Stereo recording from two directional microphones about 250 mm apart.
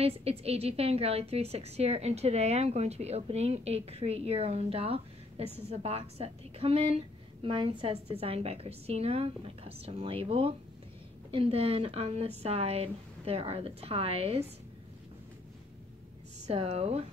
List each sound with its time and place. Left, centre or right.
0.0 s a woman's voice: right
16.4 s a woman's voice: right